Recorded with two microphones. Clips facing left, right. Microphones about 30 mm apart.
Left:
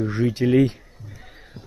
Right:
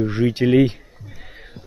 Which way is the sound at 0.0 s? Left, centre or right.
Right.